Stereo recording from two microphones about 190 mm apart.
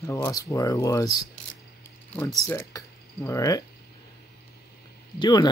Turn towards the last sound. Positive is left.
turn(degrees=20)  # may be behind; listen again after turning